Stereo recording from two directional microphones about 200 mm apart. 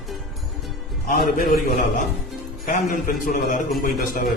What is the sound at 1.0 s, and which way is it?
Speech, 45° left (ahead or behind).